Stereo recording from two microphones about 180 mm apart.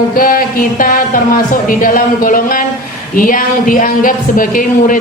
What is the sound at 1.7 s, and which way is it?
Speech, 50° left (ahead or behind).